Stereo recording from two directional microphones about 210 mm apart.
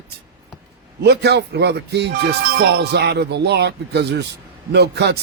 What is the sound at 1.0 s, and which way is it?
Speech, 50° right (ahead or behind).